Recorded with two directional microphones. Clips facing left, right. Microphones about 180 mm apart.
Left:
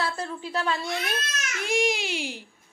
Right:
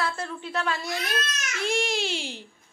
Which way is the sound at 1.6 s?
15° left (ahead or behind).